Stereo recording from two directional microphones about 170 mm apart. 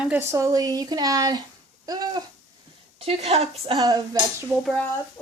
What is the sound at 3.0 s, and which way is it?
Speech, 35° right (ahead or behind).